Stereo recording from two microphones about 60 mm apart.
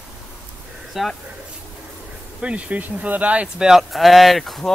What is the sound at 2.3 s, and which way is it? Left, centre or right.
Speech, right.